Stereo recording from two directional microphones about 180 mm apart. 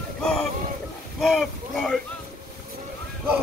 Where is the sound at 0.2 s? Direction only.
5° left (ahead or behind).